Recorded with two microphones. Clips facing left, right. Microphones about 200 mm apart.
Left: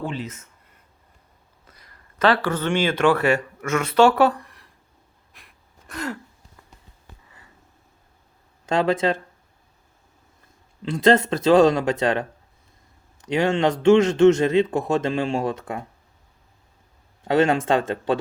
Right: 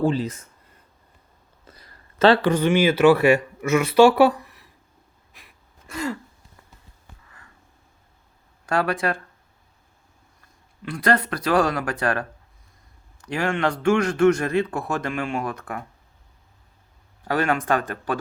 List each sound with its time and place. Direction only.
0.0 s speech: 35° right (ahead or behind)
1.6 s a sound: 30° right (ahead or behind)
2.5 s speech: 10° right (ahead or behind)
5.3 s gasp: centre (ahead or behind)
7.3 s sniff: 20° left (ahead or behind)
8.6 s a man's voice: 25° left (ahead or behind)
10.8 s a man's voice: 25° left (ahead or behind)
17.2 s a man's voice: 25° left (ahead or behind)